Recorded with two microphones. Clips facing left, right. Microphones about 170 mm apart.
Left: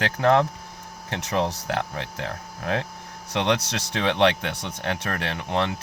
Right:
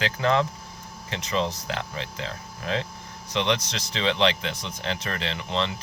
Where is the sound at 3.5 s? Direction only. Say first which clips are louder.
Left 2 dB; 70° left (ahead or behind).